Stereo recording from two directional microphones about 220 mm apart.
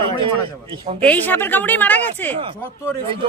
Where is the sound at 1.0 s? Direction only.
5° left (ahead or behind).